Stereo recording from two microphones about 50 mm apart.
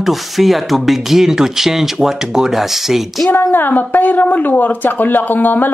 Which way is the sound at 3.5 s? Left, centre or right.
Left.